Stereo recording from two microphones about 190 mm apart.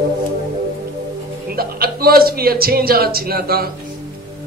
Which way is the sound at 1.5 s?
50° right (ahead or behind).